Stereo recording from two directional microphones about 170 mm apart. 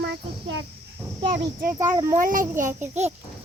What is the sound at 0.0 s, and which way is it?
Insect, 90° right.